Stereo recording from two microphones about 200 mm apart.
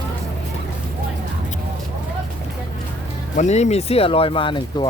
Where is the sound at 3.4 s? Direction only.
35° left (ahead or behind).